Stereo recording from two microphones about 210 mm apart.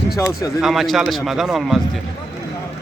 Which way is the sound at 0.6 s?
Centre (ahead or behind).